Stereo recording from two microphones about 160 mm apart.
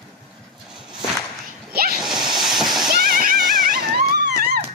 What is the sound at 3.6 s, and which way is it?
Wail, 65° right (ahead or behind).